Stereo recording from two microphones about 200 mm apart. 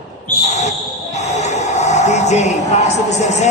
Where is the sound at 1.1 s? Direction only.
35° left (ahead or behind).